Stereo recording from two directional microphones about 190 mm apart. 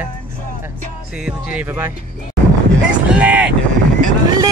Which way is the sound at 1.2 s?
5° right (ahead or behind).